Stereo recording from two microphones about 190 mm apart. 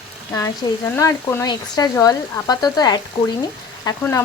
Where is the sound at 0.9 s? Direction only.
15° left (ahead or behind).